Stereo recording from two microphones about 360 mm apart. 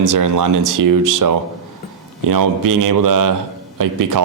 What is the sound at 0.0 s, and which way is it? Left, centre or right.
Speech, right.